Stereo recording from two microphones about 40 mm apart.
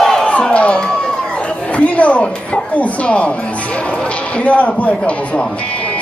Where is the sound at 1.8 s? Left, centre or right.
Left.